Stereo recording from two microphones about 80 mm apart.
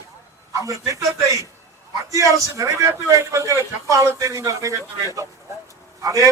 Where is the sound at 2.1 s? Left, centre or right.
Right.